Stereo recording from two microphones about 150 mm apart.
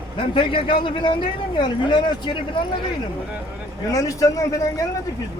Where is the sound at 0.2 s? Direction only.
35° left (ahead or behind).